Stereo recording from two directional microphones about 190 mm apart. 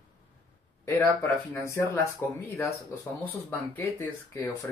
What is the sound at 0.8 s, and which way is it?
Speech, 15° left (ahead or behind).